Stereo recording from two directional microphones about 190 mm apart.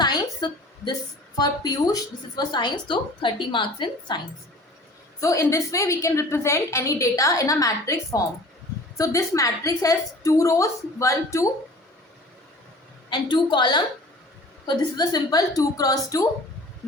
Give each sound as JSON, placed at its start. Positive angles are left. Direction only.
{"t": 0.0, "sound": "a sound", "side_deg": 20}
{"t": 1.4, "sound": "a woman's voice", "side_deg": 20}
{"t": 5.2, "sound": "a woman's voice", "side_deg": 15}
{"t": 13.3, "sound": "a woman's voice", "side_deg": 25}